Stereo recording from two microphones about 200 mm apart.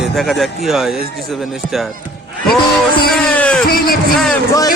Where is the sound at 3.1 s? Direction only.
5° left (ahead or behind).